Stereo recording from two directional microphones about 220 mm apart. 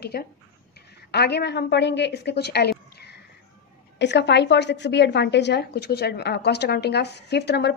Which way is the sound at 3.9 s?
50° left (ahead or behind).